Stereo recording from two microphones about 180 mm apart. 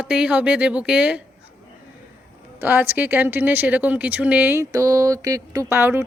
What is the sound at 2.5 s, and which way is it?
A woman's voice, 10° right (ahead or behind).